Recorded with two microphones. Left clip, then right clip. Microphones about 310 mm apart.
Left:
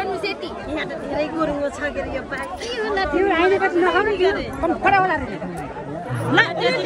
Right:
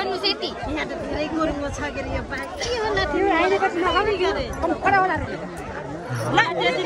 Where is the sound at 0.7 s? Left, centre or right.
Centre.